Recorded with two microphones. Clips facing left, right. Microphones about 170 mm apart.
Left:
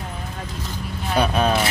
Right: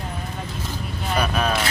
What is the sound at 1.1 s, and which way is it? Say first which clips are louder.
Speech: left 3 dB; 30° left (ahead or behind).